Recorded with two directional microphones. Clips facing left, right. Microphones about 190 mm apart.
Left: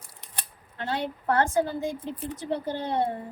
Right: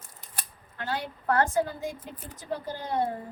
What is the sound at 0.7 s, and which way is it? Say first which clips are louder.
A woman's voice: left 3 dB; 25° left (ahead or behind).